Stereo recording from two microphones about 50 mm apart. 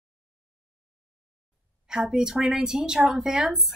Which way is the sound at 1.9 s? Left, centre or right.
Centre.